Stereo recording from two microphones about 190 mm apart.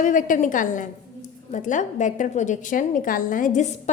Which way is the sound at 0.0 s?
45° left (ahead or behind).